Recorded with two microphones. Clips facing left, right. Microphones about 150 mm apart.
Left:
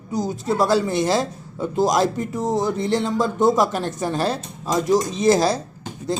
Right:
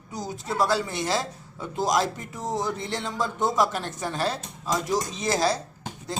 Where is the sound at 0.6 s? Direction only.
35° left (ahead or behind).